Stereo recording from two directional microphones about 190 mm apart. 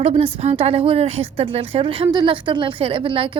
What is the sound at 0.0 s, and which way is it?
Speech, 30° right (ahead or behind).